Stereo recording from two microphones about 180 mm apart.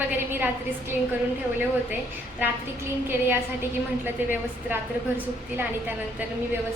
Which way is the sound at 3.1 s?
10° right (ahead or behind).